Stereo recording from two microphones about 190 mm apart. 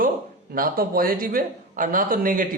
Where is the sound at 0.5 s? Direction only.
50° right (ahead or behind).